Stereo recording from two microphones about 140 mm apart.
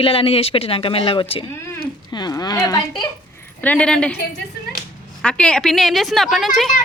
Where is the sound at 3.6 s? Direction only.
10° left (ahead or behind).